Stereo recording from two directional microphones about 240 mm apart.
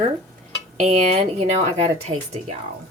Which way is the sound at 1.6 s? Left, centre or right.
Right.